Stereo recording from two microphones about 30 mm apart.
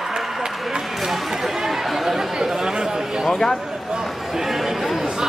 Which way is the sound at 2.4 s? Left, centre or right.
Right.